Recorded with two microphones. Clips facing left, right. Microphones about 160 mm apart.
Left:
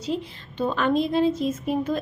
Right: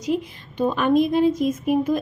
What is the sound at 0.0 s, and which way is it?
A woman's voice, 15° right (ahead or behind).